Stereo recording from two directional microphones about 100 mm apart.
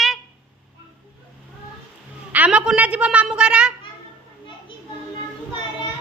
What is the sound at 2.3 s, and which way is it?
A child's voice, 15° right (ahead or behind).